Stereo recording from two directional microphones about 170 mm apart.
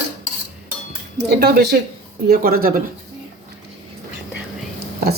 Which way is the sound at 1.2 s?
70° right (ahead or behind).